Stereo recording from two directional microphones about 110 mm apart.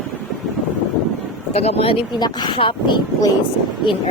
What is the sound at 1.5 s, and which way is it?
Speech, 70° left (ahead or behind).